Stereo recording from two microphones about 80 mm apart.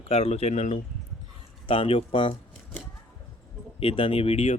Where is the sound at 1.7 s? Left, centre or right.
Left.